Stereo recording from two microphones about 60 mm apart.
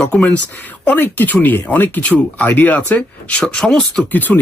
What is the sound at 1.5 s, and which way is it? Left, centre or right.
Speech, left.